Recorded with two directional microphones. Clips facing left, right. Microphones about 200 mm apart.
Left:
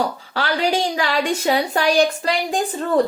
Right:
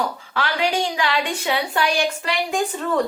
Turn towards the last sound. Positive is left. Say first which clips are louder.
# left 3 dB
turn(degrees=35)  # may be behind; listen again after turning